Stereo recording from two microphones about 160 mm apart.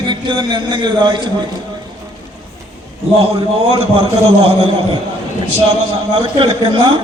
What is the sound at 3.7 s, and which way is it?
Speech, 35° right (ahead or behind).